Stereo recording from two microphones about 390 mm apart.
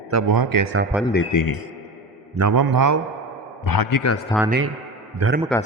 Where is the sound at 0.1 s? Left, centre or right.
Right.